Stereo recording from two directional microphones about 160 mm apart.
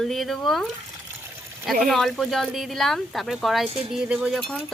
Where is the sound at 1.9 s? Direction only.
Centre (ahead or behind).